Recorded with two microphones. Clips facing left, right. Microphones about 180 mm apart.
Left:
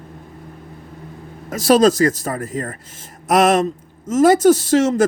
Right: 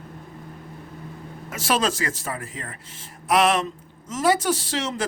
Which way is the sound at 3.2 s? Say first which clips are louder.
Left 6 dB; 45° left (ahead or behind).